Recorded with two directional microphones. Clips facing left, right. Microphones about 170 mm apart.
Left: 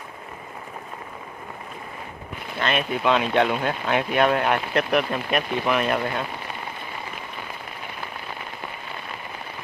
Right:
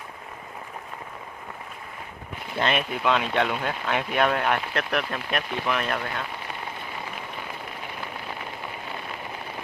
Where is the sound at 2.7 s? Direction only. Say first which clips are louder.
Left 7 dB; centre (ahead or behind).